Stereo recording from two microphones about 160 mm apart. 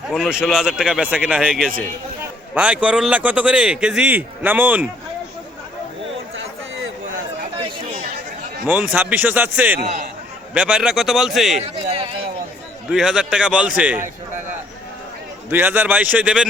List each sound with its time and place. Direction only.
0.1 s speech: 5° right (ahead or behind)
8.6 s speech: 10° right (ahead or behind)
11.9 s a sound: 35° right (ahead or behind)
12.9 s speech: 5° right (ahead or behind)
15.4 s speech: 10° right (ahead or behind)